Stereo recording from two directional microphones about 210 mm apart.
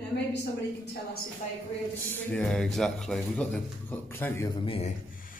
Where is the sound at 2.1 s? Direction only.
5° left (ahead or behind).